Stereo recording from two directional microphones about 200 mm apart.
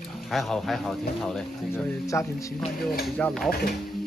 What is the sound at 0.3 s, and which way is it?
Speech, centre (ahead or behind).